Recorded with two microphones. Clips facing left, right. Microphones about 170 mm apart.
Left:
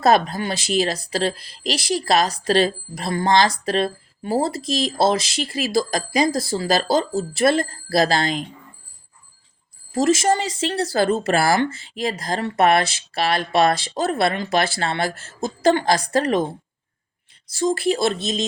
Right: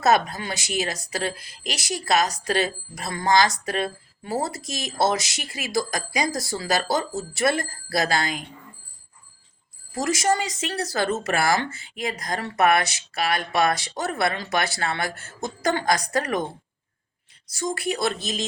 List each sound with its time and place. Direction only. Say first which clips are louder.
0.0 s a woman's voice: left 3 dB; 30° left (ahead or behind)
9.9 s speech: left 5 dB; 25° left (ahead or behind)
17.5 s speech: left 7 dB; 30° left (ahead or behind)